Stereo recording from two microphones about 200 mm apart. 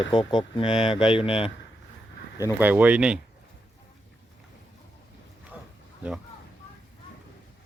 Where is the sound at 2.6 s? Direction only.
10° right (ahead or behind).